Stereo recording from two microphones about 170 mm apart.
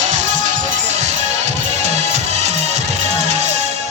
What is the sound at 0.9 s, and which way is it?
Music, 40° right (ahead or behind).